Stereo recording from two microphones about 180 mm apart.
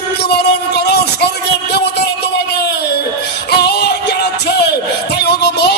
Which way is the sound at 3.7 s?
70° left (ahead or behind).